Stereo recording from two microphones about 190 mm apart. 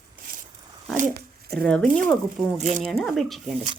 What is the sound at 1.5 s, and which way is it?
Speech, 5° left (ahead or behind).